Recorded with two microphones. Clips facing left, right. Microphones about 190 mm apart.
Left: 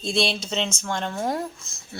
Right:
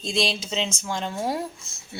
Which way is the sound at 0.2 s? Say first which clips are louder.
Left 1 dB; 5° right (ahead or behind).